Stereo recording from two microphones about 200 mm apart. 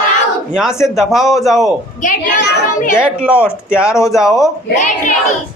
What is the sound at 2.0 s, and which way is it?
Speech, 40° left (ahead or behind).